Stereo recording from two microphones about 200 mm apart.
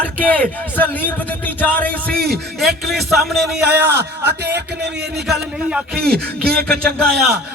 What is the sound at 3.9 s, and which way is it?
A man's voice, 55° right (ahead or behind).